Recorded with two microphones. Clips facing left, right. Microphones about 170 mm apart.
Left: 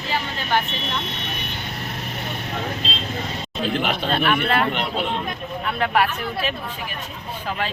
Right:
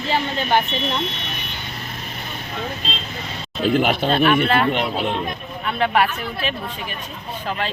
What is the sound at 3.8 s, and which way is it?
Speech, 5° right (ahead or behind).